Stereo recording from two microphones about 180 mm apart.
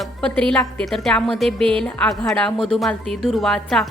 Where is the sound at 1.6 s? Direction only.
30° right (ahead or behind).